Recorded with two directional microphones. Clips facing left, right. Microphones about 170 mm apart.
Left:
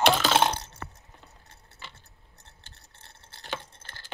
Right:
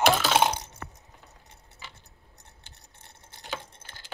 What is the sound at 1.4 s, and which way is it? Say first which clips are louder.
Keys jangling: even; 15° right (ahead or behind).